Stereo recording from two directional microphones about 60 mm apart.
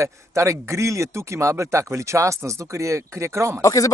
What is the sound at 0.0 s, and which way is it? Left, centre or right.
Speech, right.